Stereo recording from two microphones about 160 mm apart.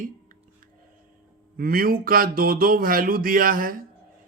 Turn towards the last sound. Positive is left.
turn(degrees=-60)  # may be behind; listen again after turning